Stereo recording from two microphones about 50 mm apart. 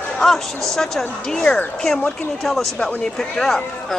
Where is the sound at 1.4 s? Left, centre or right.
Centre.